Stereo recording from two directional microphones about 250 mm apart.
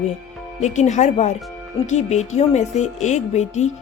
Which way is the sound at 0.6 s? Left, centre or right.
Left.